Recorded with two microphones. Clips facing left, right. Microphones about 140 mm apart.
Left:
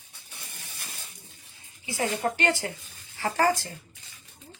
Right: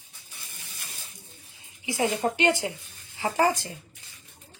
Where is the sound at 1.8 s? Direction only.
20° right (ahead or behind).